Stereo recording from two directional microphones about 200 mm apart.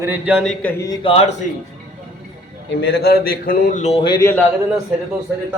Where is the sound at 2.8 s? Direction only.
55° left (ahead or behind); by 4.3 s 20° left (ahead or behind).